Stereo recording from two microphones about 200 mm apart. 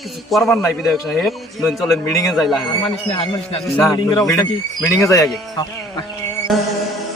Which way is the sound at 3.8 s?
15° left (ahead or behind).